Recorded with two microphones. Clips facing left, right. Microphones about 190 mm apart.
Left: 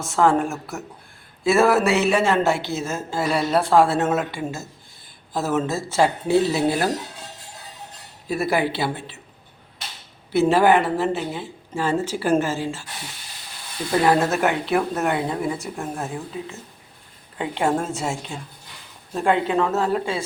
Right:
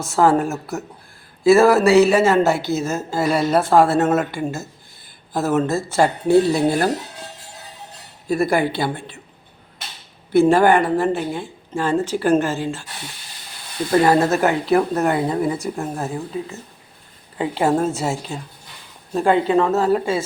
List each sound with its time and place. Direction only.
0.0 s a woman's voice: centre (ahead or behind)
8.3 s a woman's voice: 5° left (ahead or behind)
10.3 s a woman's voice: 5° left (ahead or behind)
14.0 s a woman's voice: centre (ahead or behind)